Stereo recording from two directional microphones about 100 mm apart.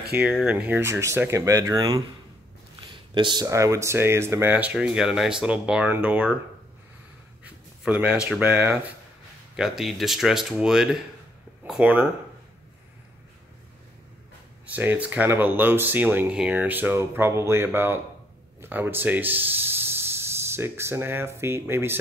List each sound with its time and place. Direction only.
0.2 s speech: centre (ahead or behind)
0.5 s speech: 15° right (ahead or behind)
0.8 s speech: 25° right (ahead or behind)
3.2 s speech: 50° right (ahead or behind)
3.4 s speech: 30° right (ahead or behind); by 6.3 s 15° right (ahead or behind)
7.8 s speech: 10° right (ahead or behind)
9.6 s speech: centre (ahead or behind)
14.8 s speech: 20° right (ahead or behind)